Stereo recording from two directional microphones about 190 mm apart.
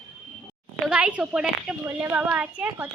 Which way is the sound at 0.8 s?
5° right (ahead or behind).